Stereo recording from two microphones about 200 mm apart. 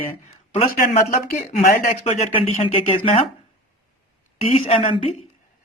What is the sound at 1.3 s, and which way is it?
Speech, 45° left (ahead or behind).